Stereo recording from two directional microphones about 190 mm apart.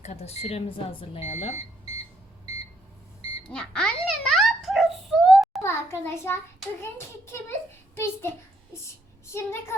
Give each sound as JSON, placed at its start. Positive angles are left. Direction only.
{"t": 0.0, "sound": "speech", "side_deg": 35}
{"t": 3.5, "sound": "a sound", "side_deg": 5}
{"t": 5.6, "sound": "a child's voice", "side_deg": 15}
{"t": 7.9, "sound": "a child's voice", "side_deg": 15}